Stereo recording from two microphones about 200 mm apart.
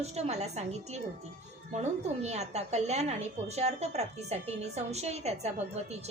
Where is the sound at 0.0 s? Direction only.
30° right (ahead or behind).